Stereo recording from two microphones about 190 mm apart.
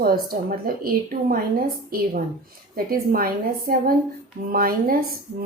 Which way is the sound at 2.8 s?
50° right (ahead or behind).